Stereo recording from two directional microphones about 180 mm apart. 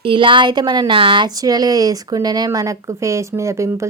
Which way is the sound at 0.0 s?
30° right (ahead or behind).